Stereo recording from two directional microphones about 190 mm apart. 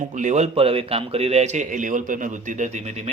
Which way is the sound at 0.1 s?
40° right (ahead or behind).